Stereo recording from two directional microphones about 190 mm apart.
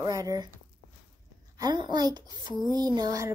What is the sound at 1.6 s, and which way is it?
A child's voice, 20° right (ahead or behind).